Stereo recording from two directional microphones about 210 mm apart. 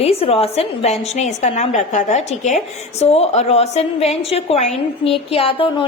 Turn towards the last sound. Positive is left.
turn(degrees=25)  # may be behind; listen again after turning